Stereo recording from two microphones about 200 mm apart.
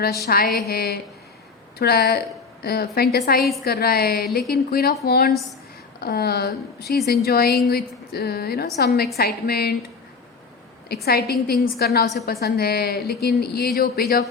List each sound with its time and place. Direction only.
0.3 s a woman's voice: 50° left (ahead or behind)
10.8 s a woman's voice: 50° left (ahead or behind)